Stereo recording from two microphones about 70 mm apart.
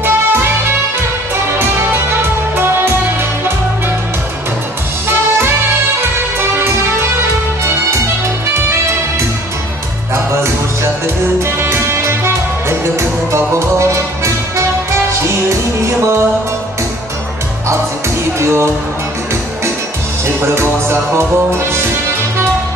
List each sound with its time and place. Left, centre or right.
0.0 s music: right
2.5 s music: right
10.1 s music: right
18.4 s music: right
20.2 s music: right